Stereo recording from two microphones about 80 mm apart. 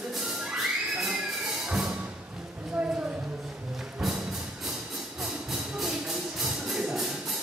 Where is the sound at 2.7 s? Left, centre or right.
Centre.